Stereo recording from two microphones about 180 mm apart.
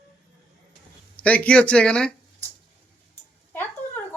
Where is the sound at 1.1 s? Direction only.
10° left (ahead or behind).